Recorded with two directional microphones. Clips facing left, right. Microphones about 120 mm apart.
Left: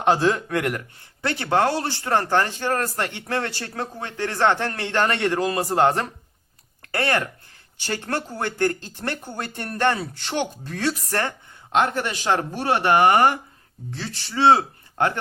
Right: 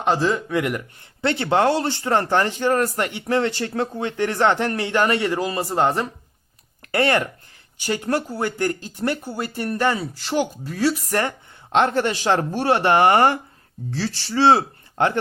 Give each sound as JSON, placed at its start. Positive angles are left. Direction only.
{"t": 0.0, "sound": "speech", "side_deg": 0}
{"t": 1.2, "sound": "speech", "side_deg": -25}
{"t": 6.9, "sound": "speech", "side_deg": -20}
{"t": 11.1, "sound": "speech", "side_deg": -20}